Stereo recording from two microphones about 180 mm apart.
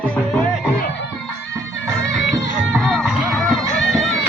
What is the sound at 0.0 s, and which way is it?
Music, 5° left (ahead or behind).